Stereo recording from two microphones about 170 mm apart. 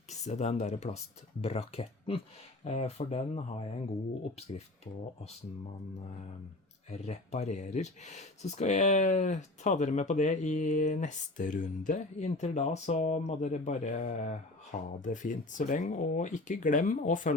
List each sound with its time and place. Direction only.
0.1 s speech: 40° left (ahead or behind)
4.5 s speech: 45° left (ahead or behind)
6.9 s speech: 40° left (ahead or behind)